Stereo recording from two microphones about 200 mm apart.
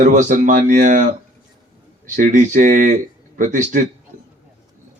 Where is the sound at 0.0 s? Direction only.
40° right (ahead or behind).